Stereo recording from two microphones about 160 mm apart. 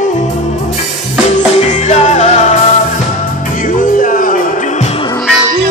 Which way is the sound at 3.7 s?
55° left (ahead or behind).